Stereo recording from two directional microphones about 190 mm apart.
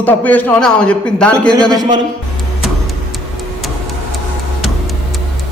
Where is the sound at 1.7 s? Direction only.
20° right (ahead or behind).